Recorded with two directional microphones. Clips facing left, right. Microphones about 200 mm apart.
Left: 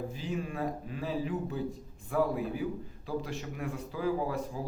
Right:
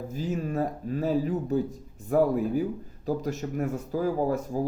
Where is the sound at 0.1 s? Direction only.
40° right (ahead or behind).